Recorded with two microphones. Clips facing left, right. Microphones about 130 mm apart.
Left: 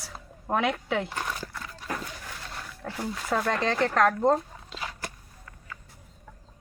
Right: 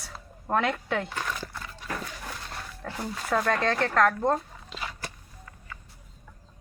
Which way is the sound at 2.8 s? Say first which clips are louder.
Left 1 dB; 10° left (ahead or behind).